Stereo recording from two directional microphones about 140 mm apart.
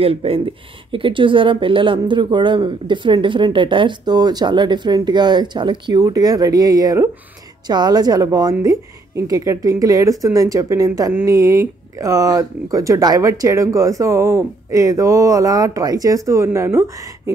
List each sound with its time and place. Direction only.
0.0 s speech: 45° right (ahead or behind); by 16.9 s 20° right (ahead or behind)